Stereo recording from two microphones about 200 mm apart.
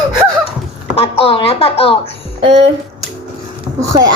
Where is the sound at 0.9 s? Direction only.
30° left (ahead or behind).